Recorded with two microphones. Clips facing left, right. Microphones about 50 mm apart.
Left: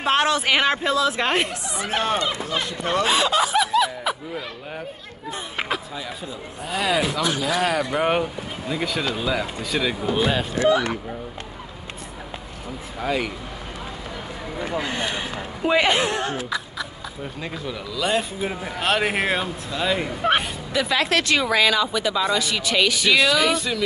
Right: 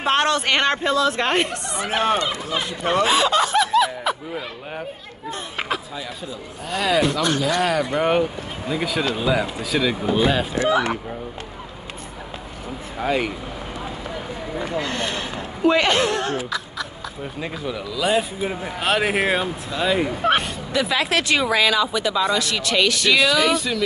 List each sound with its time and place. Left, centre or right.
0.0 s speech: centre
1.9 s speech: centre
3.1 s snicker: centre
4.3 s speech: centre
5.3 s speech: centre
13.0 s speech: right
14.6 s speech: centre
17.2 s speech: centre